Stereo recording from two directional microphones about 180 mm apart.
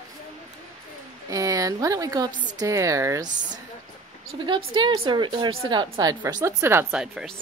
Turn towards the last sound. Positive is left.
turn(degrees=0)  # may be behind; listen again after turning